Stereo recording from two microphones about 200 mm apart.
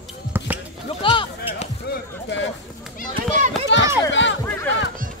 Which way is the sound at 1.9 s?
55° left (ahead or behind).